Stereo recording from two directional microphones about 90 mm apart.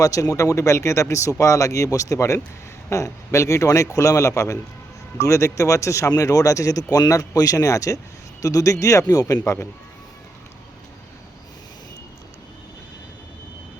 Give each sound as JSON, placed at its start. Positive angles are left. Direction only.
{"t": 0.0, "sound": "speech", "side_deg": 40}